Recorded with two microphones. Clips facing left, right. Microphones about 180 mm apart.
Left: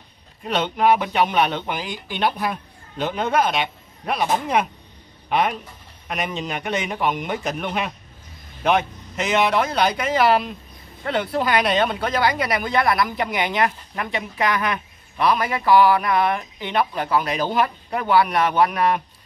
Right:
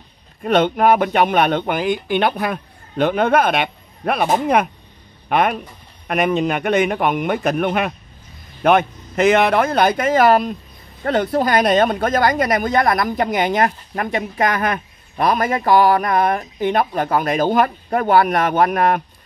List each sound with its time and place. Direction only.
0.4 s speech: 50° right (ahead or behind)